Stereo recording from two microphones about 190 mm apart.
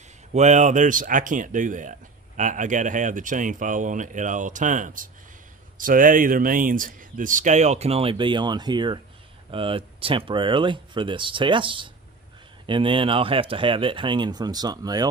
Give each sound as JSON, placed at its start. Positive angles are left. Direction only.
{"t": 0.3, "sound": "speech", "side_deg": -40}